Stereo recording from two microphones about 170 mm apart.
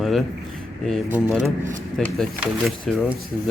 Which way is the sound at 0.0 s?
Centre (ahead or behind).